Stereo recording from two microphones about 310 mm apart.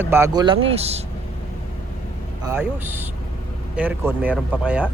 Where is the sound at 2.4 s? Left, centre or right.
Centre.